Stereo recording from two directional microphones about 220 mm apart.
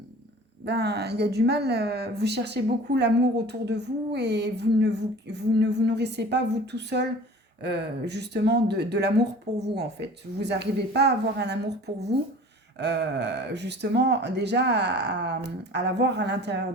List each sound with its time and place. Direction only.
0.6 s speech: 50° right (ahead or behind)
9.5 s a woman's voice: 30° right (ahead or behind)
10.4 s speech: 50° right (ahead or behind)
12.8 s speech: 50° right (ahead or behind)